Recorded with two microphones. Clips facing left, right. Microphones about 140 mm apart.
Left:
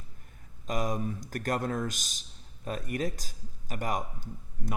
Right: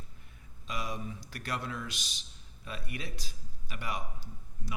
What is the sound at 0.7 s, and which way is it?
Speech, 45° left (ahead or behind).